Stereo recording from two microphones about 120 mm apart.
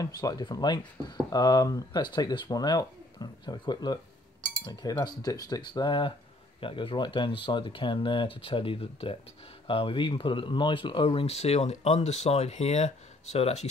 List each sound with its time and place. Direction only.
0.0 s speech: 30° left (ahead or behind); by 13.7 s 65° left (ahead or behind)